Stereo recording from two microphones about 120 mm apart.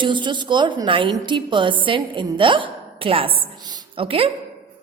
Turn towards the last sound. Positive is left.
turn(degrees=-50)  # may be behind; listen again after turning